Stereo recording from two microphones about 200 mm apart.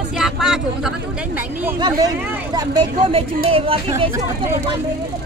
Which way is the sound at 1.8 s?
20° right (ahead or behind).